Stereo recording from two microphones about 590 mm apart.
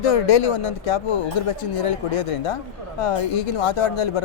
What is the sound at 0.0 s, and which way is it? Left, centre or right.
Speech, left.